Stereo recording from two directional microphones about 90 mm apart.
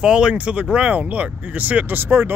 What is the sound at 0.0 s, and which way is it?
Speech, 10° right (ahead or behind).